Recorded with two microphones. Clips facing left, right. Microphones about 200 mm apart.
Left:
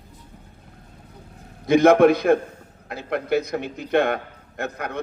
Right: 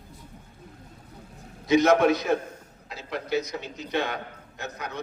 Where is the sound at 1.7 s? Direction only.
55° left (ahead or behind).